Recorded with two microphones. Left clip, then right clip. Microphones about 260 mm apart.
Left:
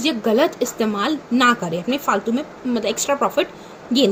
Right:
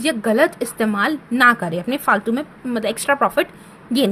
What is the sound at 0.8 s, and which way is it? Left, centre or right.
A woman's voice, right.